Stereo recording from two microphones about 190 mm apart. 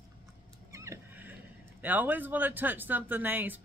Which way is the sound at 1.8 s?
10° right (ahead or behind).